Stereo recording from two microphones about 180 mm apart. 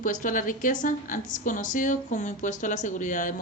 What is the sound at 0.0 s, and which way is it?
Speech, 45° left (ahead or behind).